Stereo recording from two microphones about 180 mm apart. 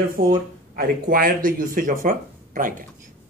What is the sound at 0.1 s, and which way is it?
Speech, 50° right (ahead or behind).